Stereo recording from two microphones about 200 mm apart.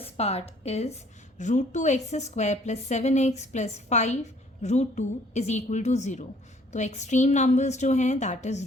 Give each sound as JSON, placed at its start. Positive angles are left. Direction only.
{"t": 0.0, "sound": "a woman's voice", "side_deg": 30}